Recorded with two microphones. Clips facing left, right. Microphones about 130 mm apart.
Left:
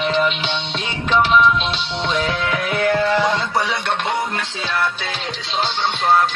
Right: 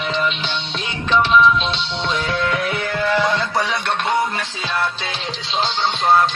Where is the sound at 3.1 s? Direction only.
15° left (ahead or behind).